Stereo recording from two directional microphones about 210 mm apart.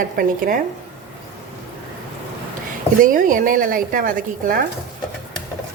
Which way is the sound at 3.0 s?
40° right (ahead or behind).